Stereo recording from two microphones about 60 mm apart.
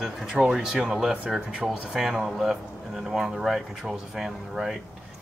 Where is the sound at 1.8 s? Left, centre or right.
Centre.